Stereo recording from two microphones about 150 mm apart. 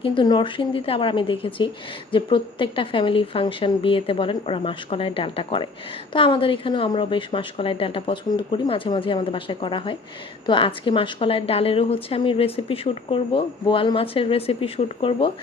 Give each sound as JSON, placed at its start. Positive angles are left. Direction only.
{"t": 0.0, "sound": "a woman's voice", "side_deg": 35}